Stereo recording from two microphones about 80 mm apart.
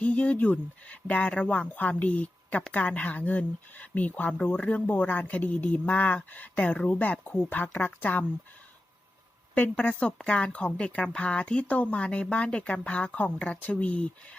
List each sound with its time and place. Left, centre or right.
0.0 s speech: centre
9.6 s speech: centre